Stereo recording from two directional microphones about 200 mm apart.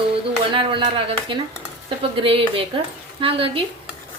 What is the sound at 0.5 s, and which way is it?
Speech, 25° right (ahead or behind).